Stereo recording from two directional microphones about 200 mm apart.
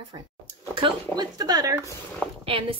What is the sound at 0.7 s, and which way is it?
A woman's voice, 20° right (ahead or behind).